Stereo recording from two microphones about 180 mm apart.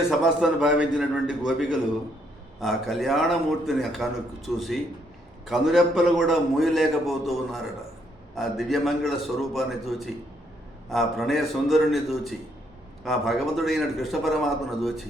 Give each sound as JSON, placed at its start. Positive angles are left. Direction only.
{"t": 0.1, "sound": "a man's voice", "side_deg": 0}